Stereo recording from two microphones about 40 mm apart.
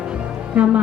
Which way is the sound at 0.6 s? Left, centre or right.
Right.